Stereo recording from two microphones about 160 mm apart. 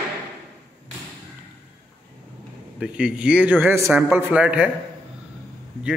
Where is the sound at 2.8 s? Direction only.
5° right (ahead or behind).